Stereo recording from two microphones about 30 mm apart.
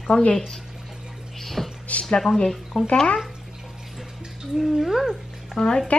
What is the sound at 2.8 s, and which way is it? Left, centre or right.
Speech, centre.